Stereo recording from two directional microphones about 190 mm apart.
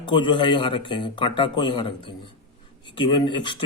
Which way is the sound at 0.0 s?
25° left (ahead or behind).